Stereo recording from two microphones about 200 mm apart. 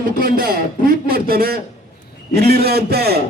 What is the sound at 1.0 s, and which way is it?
A man's voice, 50° right (ahead or behind).